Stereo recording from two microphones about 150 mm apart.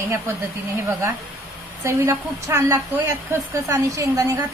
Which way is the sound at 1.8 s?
20° right (ahead or behind).